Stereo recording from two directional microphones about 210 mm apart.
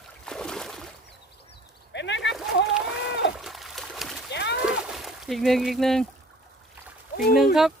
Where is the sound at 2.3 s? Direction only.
Centre (ahead or behind).